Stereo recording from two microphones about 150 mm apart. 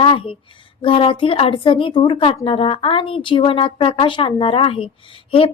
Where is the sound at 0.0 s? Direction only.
35° left (ahead or behind).